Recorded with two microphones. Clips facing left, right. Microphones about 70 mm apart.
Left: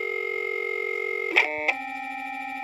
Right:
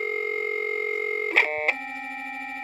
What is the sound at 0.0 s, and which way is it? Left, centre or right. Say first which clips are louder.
Dial tone: right 1 dB; right.